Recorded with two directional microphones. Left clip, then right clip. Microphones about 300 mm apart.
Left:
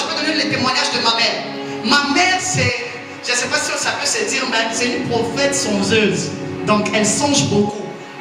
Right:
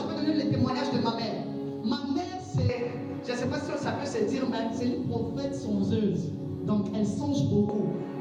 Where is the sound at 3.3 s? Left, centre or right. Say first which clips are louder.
Left 14 dB; centre.